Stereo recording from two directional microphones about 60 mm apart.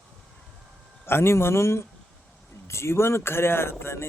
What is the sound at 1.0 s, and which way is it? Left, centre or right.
Speech, left.